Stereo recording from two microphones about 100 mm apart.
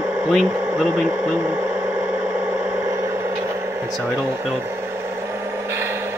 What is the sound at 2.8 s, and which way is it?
Vehicle, 35° right (ahead or behind).